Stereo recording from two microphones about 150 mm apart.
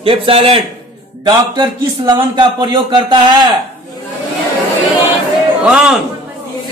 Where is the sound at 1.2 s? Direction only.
30° right (ahead or behind).